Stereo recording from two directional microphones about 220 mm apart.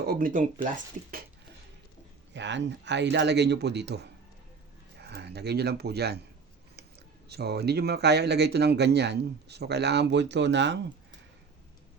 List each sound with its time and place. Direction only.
0.0 s speech: 40° right (ahead or behind)
2.3 s speech: 55° right (ahead or behind)
7.3 s speech: 45° right (ahead or behind)